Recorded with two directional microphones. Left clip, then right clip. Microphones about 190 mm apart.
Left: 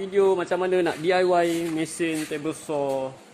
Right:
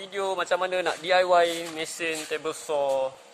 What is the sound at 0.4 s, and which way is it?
Speech, centre (ahead or behind).